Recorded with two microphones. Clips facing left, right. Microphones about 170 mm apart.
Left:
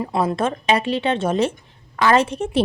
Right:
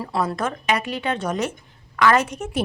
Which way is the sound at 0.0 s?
20° left (ahead or behind).